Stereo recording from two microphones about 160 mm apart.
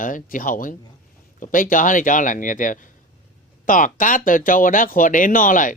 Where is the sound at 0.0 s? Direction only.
55° left (ahead or behind).